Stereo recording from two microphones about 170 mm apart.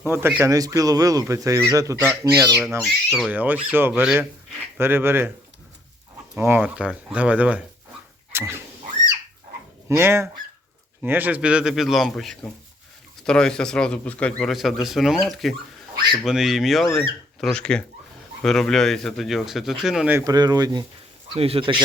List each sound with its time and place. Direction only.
0.0 s speech: 15° right (ahead or behind)
6.3 s speech: 10° right (ahead or behind)
8.3 s dog: 15° right (ahead or behind)
10.0 s speech: 15° right (ahead or behind)
20.1 s speech: 20° right (ahead or behind)
21.3 s a man's voice: 35° right (ahead or behind)